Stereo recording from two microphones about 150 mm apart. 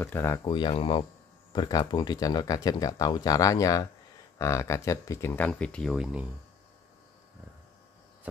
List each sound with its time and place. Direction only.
0.0 s speech: 15° left (ahead or behind)
0.4 s speech: 30° left (ahead or behind); by 6.2 s 5° right (ahead or behind)